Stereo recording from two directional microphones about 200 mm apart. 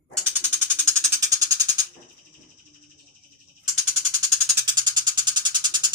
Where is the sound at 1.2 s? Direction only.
20° right (ahead or behind).